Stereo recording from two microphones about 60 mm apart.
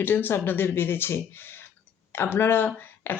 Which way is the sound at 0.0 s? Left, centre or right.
Left.